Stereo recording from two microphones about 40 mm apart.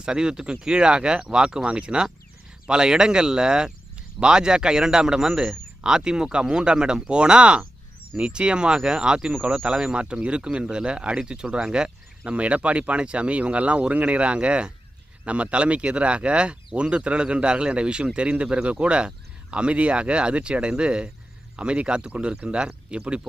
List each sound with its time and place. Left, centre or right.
0.0 s speech: centre